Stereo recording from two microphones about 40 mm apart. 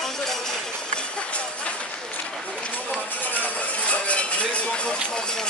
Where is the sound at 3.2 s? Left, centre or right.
Left.